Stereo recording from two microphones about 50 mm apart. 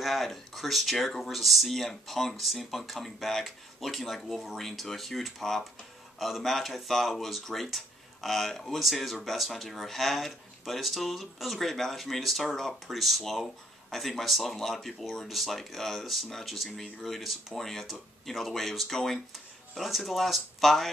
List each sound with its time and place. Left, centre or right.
0.0 s speech: centre